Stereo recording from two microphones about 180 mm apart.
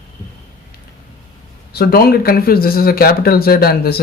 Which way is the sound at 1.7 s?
60° left (ahead or behind).